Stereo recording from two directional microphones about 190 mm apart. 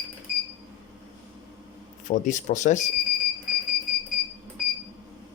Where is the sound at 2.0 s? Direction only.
40° left (ahead or behind).